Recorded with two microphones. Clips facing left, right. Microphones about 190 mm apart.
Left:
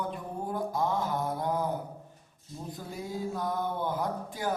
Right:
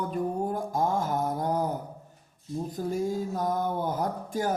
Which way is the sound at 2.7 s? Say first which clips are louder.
Right 8 dB; 45° right (ahead or behind).